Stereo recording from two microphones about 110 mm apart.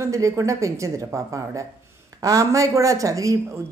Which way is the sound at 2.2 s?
30° right (ahead or behind).